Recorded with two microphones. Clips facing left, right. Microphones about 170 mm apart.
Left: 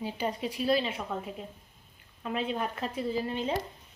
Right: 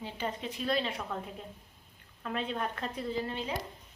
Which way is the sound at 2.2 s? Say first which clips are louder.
Left 3 dB; 10° left (ahead or behind).